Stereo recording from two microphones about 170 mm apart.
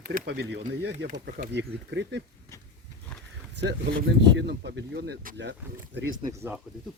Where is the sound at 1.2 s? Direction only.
65° right (ahead or behind); by 2.2 s 90° right.